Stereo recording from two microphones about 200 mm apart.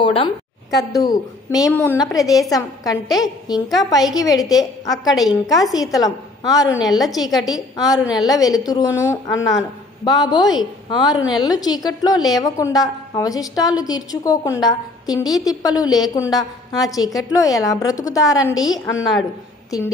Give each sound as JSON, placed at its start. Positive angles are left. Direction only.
{"t": 0.0, "sound": "a woman's voice", "side_deg": 25}